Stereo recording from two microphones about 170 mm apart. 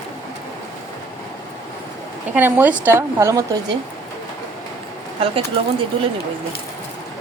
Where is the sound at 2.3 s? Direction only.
10° right (ahead or behind).